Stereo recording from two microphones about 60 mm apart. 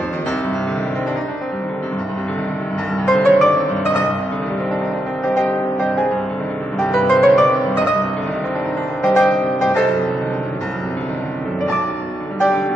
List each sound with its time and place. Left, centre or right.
3.1 s music: centre
6.8 s music: centre
9.0 s music: centre